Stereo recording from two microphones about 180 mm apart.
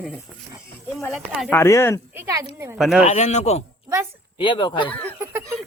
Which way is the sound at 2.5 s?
15° right (ahead or behind).